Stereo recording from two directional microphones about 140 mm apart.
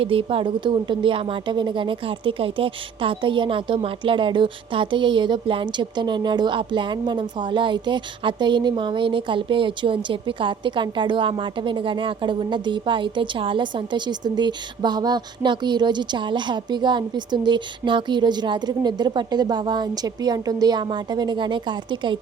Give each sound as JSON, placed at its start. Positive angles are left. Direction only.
{"t": 0.0, "sound": "speech", "side_deg": -40}